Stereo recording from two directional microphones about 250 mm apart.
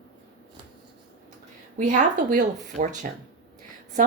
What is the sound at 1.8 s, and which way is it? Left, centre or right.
A woman's voice, right.